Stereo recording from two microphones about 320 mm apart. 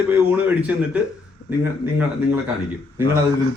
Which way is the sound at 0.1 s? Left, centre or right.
Centre.